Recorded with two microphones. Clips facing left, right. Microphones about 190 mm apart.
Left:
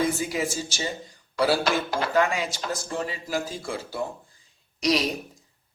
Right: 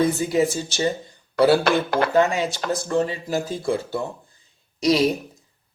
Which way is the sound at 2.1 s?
25° right (ahead or behind).